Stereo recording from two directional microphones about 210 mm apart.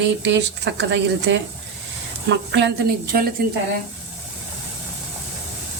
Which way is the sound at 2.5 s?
55° right (ahead or behind).